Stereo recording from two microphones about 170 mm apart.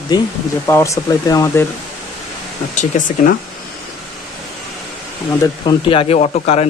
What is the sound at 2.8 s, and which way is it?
Speech, 50° left (ahead or behind).